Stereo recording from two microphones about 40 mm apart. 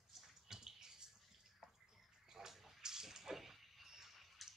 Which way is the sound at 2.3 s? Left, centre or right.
Centre.